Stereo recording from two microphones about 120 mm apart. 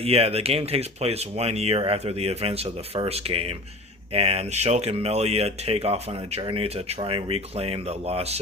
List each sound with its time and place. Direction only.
0.0 s speech: 55° right (ahead or behind)